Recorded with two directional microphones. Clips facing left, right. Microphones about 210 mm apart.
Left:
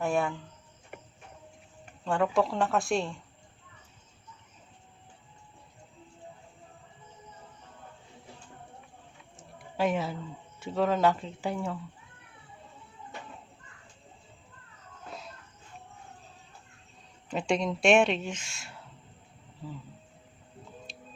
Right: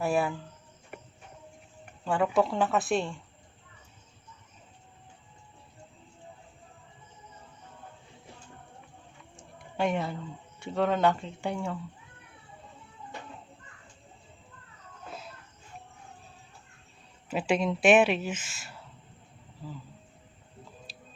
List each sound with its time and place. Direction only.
0.0 s speech: 5° right (ahead or behind)
2.0 s speech: 5° right (ahead or behind)
9.3 s a sound: centre (ahead or behind)
10.6 s speech: centre (ahead or behind)
17.2 s speech: 5° right (ahead or behind)